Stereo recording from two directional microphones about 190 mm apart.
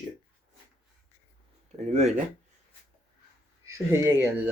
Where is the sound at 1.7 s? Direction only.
35° right (ahead or behind).